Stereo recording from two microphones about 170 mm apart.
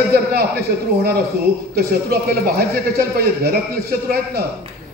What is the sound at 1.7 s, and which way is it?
A man's voice, 65° right (ahead or behind).